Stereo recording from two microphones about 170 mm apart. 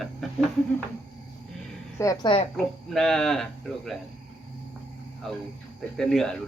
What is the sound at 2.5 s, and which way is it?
Speech, centre (ahead or behind).